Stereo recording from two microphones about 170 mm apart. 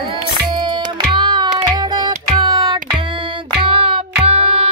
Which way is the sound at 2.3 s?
25° right (ahead or behind).